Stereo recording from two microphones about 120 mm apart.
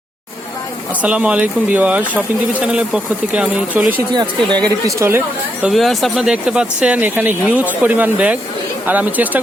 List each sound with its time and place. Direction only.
1.0 s speech: 10° right (ahead or behind)
4.1 s speech: 35° right (ahead or behind)
4.9 s speech: 20° right (ahead or behind)
5.6 s speech: centre (ahead or behind)